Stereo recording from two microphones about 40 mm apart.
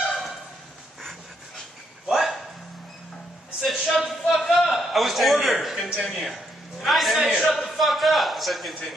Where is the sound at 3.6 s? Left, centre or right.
Centre.